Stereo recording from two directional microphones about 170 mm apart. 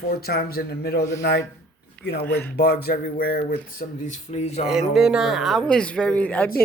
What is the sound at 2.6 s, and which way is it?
Speech, 65° left (ahead or behind).